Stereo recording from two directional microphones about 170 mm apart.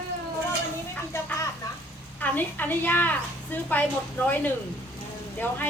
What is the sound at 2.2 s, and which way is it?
A woman's voice, 10° left (ahead or behind).